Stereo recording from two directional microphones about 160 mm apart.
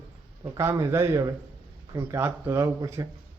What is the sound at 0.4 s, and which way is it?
A man's voice, 15° right (ahead or behind).